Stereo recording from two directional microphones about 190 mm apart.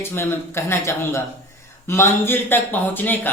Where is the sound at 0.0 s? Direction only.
10° left (ahead or behind).